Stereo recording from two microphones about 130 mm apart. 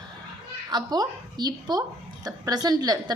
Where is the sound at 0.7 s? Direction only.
30° right (ahead or behind).